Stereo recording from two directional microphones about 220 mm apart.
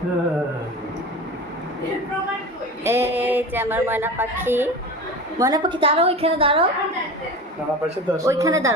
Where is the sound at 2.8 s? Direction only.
10° right (ahead or behind).